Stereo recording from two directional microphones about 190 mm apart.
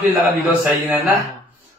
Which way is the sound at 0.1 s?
10° right (ahead or behind).